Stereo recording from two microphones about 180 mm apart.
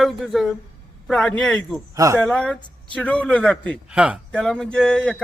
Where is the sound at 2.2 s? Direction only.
5° left (ahead or behind).